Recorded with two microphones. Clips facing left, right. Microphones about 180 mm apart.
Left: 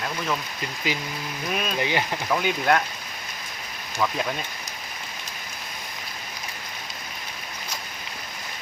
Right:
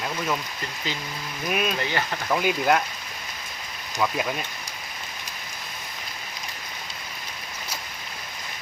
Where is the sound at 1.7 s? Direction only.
15° left (ahead or behind).